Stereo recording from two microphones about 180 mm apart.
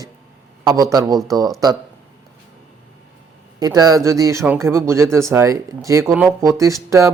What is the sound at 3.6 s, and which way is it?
Speech, 20° right (ahead or behind).